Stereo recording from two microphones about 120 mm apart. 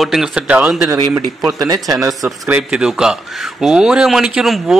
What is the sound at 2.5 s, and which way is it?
A man's voice, 5° right (ahead or behind).